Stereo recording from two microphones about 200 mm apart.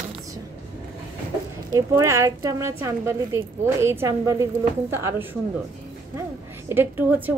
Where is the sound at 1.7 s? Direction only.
15° right (ahead or behind).